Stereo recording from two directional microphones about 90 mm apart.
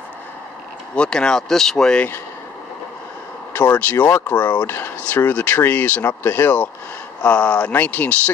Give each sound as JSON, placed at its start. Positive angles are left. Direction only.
{"t": 0.9, "sound": "speech", "side_deg": 10}
{"t": 3.5, "sound": "speech", "side_deg": 20}